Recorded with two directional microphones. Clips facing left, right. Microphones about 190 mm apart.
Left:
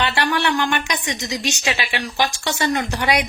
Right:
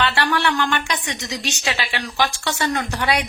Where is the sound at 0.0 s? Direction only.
15° left (ahead or behind).